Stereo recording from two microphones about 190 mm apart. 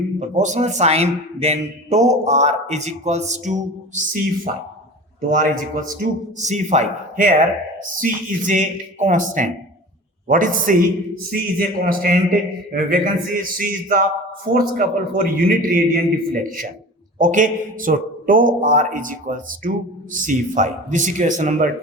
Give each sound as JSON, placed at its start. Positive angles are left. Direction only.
{"t": 0.2, "sound": "a man's voice", "side_deg": -40}
{"t": 5.3, "sound": "a man's voice", "side_deg": -45}